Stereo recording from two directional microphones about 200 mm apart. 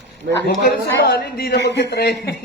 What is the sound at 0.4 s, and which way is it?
A man's voice, 50° left (ahead or behind).